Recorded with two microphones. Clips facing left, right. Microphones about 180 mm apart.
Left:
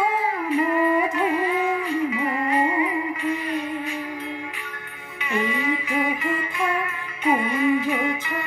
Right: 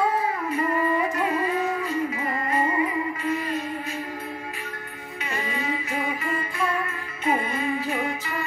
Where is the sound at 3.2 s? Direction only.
40° right (ahead or behind).